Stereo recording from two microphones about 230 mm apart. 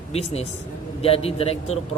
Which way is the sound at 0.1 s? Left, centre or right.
Left.